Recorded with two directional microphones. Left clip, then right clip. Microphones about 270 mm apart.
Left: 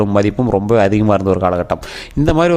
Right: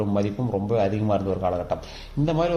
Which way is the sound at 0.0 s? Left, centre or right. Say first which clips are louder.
Left 11 dB; left.